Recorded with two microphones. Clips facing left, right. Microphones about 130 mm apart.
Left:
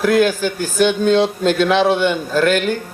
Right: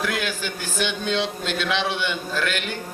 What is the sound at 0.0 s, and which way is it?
Speech, 45° left (ahead or behind).